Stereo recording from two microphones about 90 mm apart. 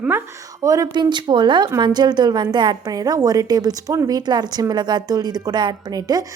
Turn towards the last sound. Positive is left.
turn(degrees=-45)  # may be behind; listen again after turning